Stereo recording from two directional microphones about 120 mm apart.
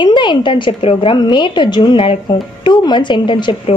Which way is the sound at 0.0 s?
40° left (ahead or behind).